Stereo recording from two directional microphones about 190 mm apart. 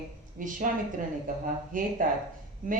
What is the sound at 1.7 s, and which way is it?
Speech, 45° right (ahead or behind).